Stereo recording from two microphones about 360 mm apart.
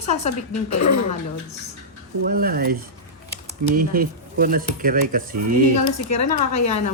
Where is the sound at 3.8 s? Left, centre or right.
Right.